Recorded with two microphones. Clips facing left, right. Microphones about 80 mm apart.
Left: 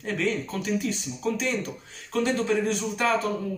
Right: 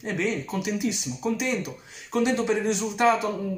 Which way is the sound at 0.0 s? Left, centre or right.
Centre.